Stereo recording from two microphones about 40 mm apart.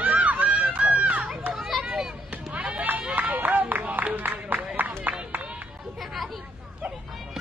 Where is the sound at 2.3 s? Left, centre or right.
Right.